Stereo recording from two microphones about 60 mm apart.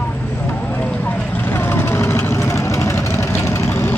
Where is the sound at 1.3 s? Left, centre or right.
Left.